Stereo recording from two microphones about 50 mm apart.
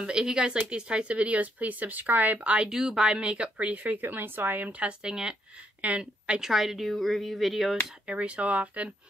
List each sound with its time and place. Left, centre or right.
0.0 s a woman's voice: centre
2.7 s a woman's voice: centre; by 4.8 s right
4.8 s speech: centre
5.8 s a woman's voice: right
6.4 s speech: centre
6.9 s a sound: centre
8.1 s a woman's voice: right